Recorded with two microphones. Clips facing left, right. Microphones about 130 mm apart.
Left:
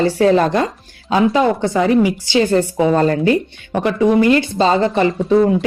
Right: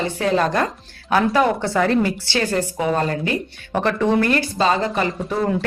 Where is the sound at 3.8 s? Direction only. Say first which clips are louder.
Left 4 dB; 15° left (ahead or behind).